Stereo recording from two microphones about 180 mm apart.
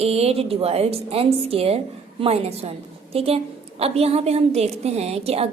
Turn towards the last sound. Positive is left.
turn(degrees=-35)  # may be behind; listen again after turning